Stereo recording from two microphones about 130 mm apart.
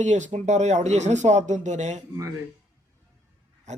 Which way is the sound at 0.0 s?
65° right (ahead or behind).